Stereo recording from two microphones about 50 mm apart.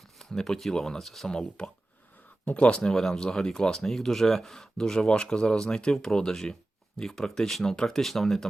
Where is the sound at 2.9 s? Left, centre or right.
Centre.